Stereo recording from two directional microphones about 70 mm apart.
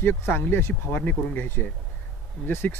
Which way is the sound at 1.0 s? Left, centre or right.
Centre.